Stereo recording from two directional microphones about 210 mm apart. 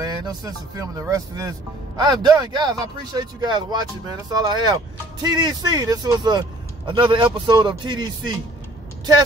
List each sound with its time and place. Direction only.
0.0 s speech: 20° right (ahead or behind)